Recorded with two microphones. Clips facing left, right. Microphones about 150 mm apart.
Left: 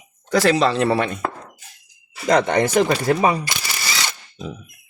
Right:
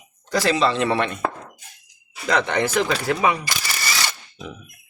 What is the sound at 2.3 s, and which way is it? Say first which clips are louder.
Speech: left 4 dB; 45° left (ahead or behind).